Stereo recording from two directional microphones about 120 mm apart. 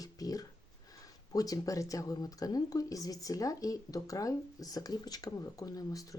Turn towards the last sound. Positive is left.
turn(degrees=30)  # may be behind; listen again after turning